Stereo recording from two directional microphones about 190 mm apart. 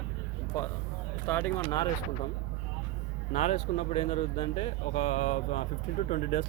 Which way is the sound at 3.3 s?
35° left (ahead or behind).